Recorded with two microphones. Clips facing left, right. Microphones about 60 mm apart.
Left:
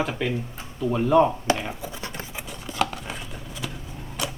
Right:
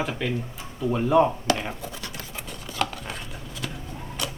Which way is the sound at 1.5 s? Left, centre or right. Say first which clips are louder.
Left 1 dB; left.